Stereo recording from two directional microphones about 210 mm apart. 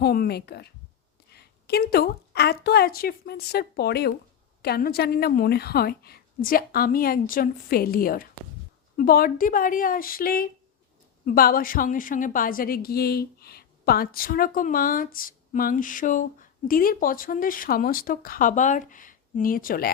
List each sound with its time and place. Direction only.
0.0 s a woman's voice: 45° left (ahead or behind)